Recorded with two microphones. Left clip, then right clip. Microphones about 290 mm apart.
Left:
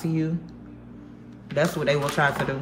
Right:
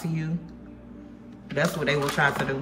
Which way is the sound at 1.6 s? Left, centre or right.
Centre.